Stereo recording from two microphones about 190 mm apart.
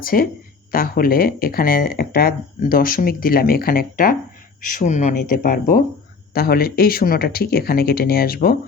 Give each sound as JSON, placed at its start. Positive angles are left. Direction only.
{"t": 0.0, "sound": "speech", "side_deg": 50}